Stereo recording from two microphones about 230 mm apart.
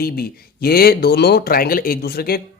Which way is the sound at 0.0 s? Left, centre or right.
Left.